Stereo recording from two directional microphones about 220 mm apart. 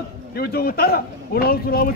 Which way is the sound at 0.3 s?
45° left (ahead or behind).